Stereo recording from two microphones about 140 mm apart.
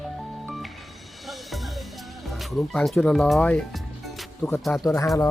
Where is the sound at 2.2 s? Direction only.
Centre (ahead or behind).